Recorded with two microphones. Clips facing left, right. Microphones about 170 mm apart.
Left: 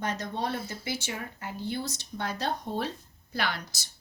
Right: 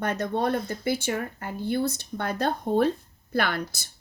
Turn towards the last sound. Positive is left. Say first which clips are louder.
# right 6 dB
turn(degrees=-55)  # may be behind; listen again after turning